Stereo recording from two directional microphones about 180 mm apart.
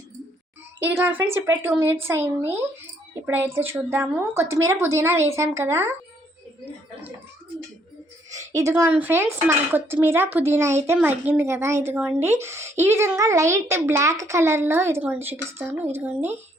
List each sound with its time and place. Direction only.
0.9 s speech: 10° right (ahead or behind)
8.3 s speech: 15° right (ahead or behind)